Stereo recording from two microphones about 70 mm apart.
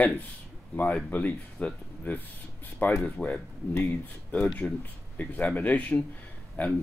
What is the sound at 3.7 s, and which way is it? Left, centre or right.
Speech, left.